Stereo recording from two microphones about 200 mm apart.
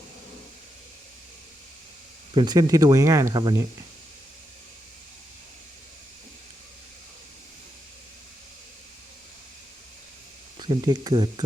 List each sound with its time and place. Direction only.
2.3 s speech: 20° right (ahead or behind)
10.6 s speech: 20° right (ahead or behind)